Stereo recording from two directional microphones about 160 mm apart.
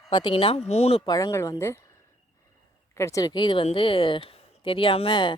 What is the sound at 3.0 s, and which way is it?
A woman's voice, 20° left (ahead or behind).